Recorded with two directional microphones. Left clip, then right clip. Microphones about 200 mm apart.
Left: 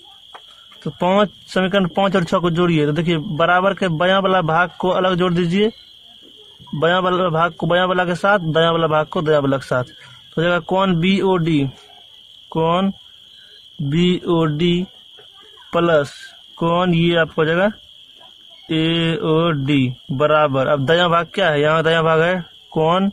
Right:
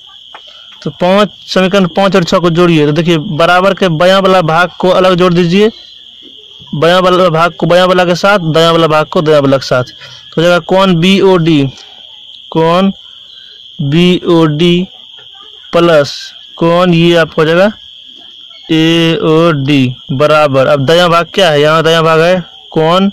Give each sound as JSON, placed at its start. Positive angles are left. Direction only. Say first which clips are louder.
{"t": 0.8, "sound": "speech", "louder": "right 8 dB", "side_deg": -25}
{"t": 6.8, "sound": "speech", "louder": "right 10 dB", "side_deg": -30}